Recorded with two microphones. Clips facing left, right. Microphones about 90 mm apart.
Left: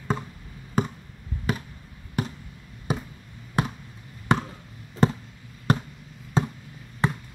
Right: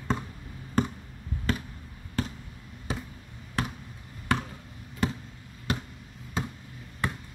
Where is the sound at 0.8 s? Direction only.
5° left (ahead or behind).